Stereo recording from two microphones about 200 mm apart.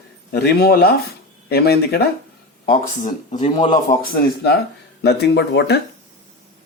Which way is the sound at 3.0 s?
35° left (ahead or behind).